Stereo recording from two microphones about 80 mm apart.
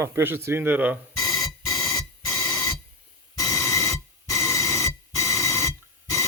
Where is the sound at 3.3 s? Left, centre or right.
Left.